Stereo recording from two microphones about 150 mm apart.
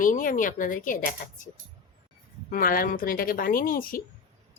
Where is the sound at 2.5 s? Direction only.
70° left (ahead or behind).